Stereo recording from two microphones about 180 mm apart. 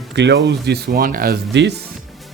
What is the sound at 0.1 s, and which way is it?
Speech, 70° right (ahead or behind).